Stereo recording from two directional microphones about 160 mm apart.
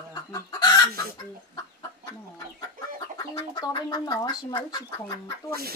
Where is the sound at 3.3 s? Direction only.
25° left (ahead or behind).